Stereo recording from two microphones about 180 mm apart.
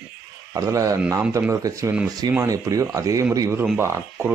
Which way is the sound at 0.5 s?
20° right (ahead or behind).